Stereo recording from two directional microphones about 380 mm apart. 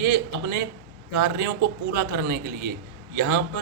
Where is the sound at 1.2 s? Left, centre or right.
Right.